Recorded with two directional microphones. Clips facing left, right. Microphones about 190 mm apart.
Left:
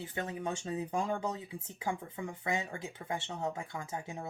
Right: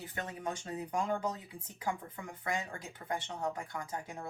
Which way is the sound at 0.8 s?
25° left (ahead or behind).